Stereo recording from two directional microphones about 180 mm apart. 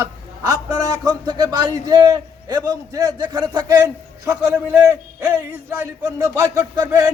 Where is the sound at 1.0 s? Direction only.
20° right (ahead or behind).